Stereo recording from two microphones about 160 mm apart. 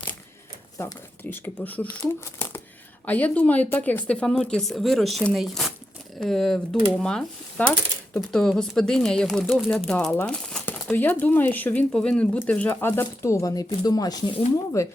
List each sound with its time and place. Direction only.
0.8 s speech: 15° left (ahead or behind)